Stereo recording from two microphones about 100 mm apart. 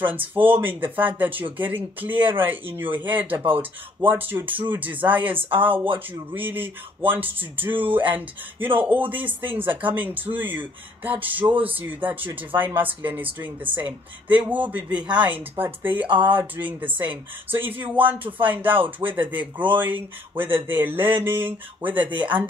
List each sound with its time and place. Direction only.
0.1 s speech: 15° right (ahead or behind)